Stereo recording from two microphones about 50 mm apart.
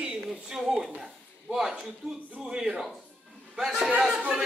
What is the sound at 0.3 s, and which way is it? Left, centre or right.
A man's voice, centre.